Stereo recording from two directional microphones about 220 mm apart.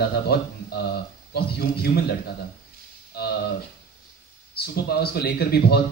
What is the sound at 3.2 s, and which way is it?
Speech, 45° left (ahead or behind).